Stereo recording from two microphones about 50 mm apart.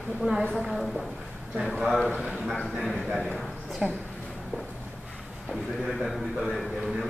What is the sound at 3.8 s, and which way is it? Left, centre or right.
Speech, centre.